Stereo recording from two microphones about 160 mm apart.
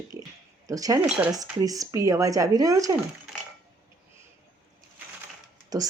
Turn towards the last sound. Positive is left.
turn(degrees=-25)  # may be behind; listen again after turning